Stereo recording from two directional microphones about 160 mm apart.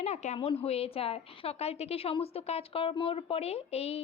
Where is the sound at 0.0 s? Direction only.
45° left (ahead or behind).